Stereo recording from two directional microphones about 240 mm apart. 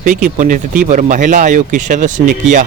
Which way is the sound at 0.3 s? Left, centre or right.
Right.